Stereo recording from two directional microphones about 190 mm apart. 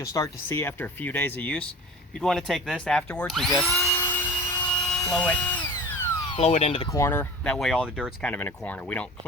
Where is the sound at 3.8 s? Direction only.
10° left (ahead or behind).